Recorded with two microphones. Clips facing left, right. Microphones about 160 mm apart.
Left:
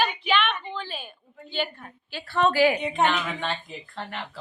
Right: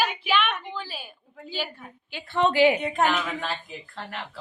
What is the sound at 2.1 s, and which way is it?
Speech, 20° right (ahead or behind).